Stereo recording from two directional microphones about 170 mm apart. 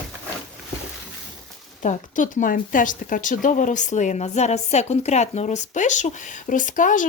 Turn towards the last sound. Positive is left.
turn(degrees=50)  # may be behind; listen again after turning